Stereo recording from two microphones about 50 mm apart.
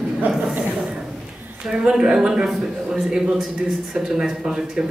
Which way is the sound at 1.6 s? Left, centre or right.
Centre.